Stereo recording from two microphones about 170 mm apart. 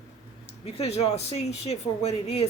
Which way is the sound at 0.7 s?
40° left (ahead or behind).